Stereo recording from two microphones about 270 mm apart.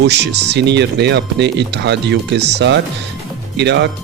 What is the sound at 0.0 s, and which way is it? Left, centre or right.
Speech, right.